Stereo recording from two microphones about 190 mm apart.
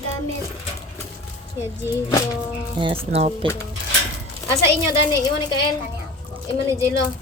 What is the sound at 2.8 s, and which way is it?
Speech, 30° right (ahead or behind).